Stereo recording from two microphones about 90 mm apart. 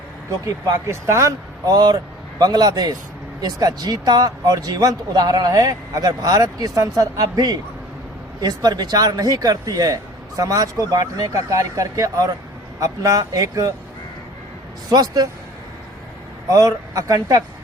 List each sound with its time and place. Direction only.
0.4 s a man's voice: 40° right (ahead or behind)
1.6 s a man's voice: 50° right (ahead or behind)
14.8 s speech: 45° right (ahead or behind)
16.5 s a man's voice: 45° right (ahead or behind)